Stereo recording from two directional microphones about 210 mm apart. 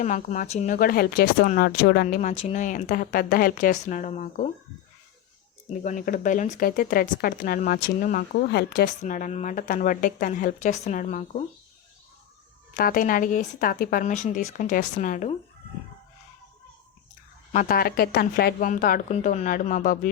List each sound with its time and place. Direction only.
0.0 s speech: 35° left (ahead or behind)
5.8 s speech: 40° left (ahead or behind)
12.7 s speech: 40° left (ahead or behind)
17.5 s speech: 40° left (ahead or behind)